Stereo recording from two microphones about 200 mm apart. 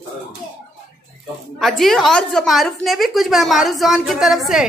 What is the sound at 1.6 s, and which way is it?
A woman's voice, centre (ahead or behind).